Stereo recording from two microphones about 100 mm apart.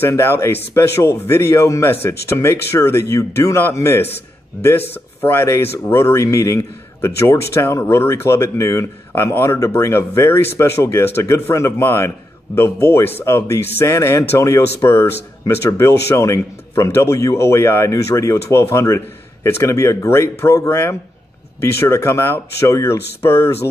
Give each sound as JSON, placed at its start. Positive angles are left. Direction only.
{"t": 0.0, "sound": "speech", "side_deg": 25}